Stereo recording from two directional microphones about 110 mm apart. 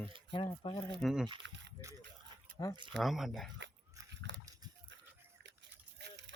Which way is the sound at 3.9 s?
30° right (ahead or behind).